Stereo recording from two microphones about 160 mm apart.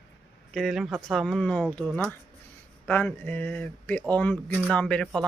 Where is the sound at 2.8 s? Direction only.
10° left (ahead or behind).